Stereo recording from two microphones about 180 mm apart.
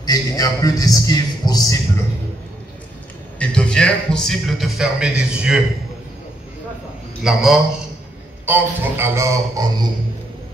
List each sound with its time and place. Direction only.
0.0 s a man's voice: 20° left (ahead or behind)
3.3 s a man's voice: 5° left (ahead or behind)
7.2 s a man's voice: centre (ahead or behind)
8.5 s a man's voice: 10° right (ahead or behind)